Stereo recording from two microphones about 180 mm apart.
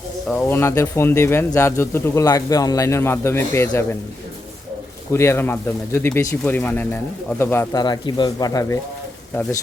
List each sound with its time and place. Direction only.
0.3 s speech: 15° left (ahead or behind)
5.1 s speech: 15° left (ahead or behind)